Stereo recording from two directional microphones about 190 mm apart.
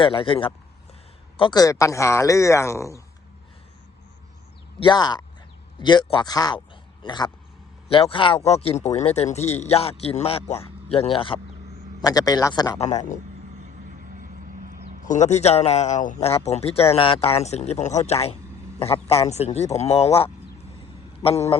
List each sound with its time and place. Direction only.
0.0 s a man's voice: 25° left (ahead or behind)
4.8 s speech: 20° left (ahead or behind)
12.8 s speech: 35° left (ahead or behind)
13.6 s vehicle: 45° right (ahead or behind)
15.0 s speech: 40° left (ahead or behind)